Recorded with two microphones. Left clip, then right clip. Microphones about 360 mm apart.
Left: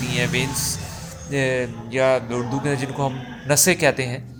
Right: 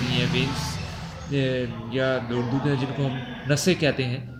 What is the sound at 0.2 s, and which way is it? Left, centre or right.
A man's voice, centre.